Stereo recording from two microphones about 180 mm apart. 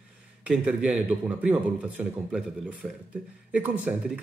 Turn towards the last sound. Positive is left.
turn(degrees=-5)  # may be behind; listen again after turning